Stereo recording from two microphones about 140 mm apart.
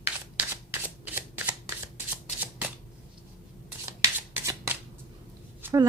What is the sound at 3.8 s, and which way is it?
Shuffling cards, 20° right (ahead or behind).